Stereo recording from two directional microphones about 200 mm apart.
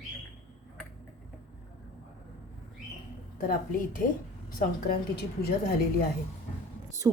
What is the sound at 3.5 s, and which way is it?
A woman's voice, 40° left (ahead or behind).